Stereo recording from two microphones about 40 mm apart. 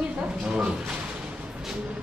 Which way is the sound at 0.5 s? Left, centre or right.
Right.